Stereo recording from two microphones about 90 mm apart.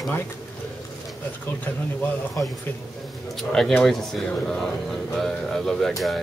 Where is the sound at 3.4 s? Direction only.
5° left (ahead or behind).